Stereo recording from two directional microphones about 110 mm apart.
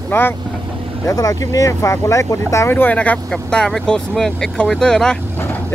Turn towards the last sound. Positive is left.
turn(degrees=5)  # may be behind; listen again after turning